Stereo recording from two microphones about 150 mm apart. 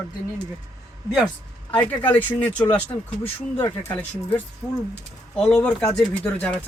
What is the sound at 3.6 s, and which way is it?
Speech, 20° left (ahead or behind).